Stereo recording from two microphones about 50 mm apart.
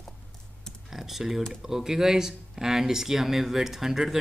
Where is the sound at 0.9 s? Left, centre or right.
Centre.